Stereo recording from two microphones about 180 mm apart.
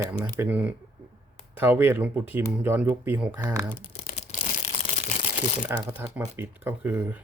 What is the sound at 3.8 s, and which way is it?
Tearing, 30° left (ahead or behind).